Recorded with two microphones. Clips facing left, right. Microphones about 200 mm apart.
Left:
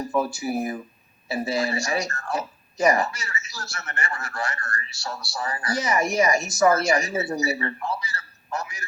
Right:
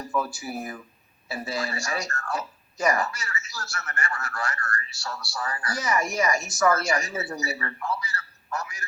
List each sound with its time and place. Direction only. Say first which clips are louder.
0.2 s a man's voice: left 6 dB; 15° left (ahead or behind)